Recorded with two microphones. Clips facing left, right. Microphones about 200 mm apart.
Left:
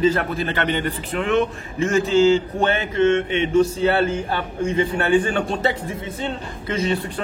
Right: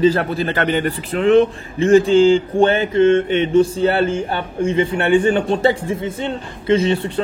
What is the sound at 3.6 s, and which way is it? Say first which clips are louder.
A man's voice: right 2 dB; 30° right (ahead or behind).